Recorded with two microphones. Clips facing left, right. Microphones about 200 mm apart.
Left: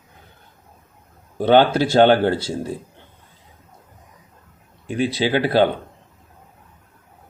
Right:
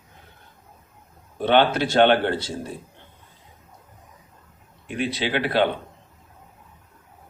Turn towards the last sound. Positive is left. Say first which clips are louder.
# left 5 dB
turn(degrees=40)  # may be behind; listen again after turning